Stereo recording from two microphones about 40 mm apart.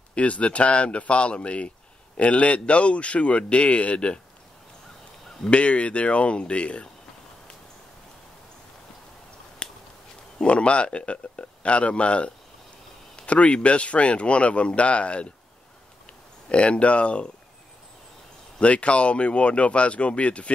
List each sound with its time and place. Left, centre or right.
0.1 s speech: left
5.4 s speech: left
9.6 s finger snapping: left
10.4 s speech: left
16.4 s speech: left
18.6 s speech: left